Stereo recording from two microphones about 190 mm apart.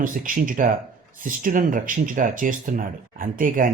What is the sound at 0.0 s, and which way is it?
Speech, 45° right (ahead or behind).